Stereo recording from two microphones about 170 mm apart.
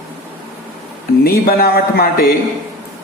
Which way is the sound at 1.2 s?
60° left (ahead or behind).